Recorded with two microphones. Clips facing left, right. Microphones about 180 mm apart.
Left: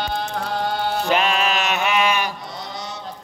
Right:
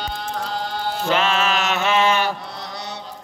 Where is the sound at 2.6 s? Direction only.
65° right (ahead or behind).